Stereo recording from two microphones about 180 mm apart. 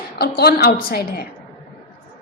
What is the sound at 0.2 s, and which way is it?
Speech, 65° left (ahead or behind).